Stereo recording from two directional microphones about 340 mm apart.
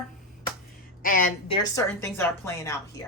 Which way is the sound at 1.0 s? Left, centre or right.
Left.